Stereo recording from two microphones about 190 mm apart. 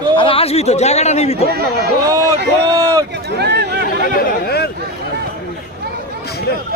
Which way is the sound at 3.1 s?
60° right (ahead or behind).